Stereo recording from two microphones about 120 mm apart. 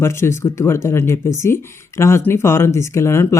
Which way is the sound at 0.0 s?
20° left (ahead or behind).